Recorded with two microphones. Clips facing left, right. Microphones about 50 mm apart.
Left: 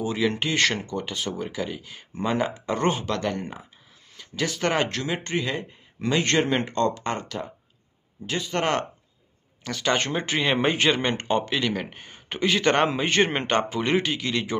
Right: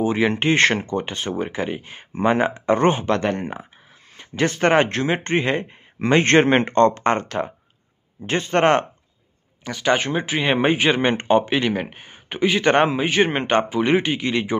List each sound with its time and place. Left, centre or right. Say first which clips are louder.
0.0 s speech: right 6 dB; right
9.7 s speech: right 4 dB; centre